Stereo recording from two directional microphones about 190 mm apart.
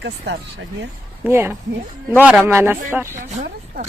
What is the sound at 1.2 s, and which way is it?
Speech, 10° right (ahead or behind).